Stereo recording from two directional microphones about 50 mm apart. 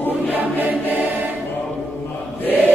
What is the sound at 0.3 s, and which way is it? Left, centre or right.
Choir, right.